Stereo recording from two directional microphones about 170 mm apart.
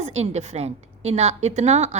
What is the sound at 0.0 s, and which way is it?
A woman's voice, 40° right (ahead or behind).